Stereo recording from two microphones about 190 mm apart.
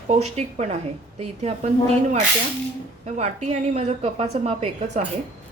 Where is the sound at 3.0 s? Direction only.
40° right (ahead or behind).